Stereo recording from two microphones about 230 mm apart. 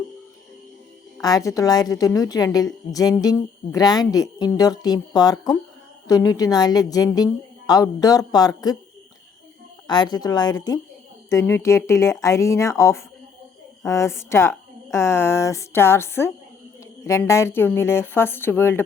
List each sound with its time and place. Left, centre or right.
1.2 s speech: centre
9.8 s speech: centre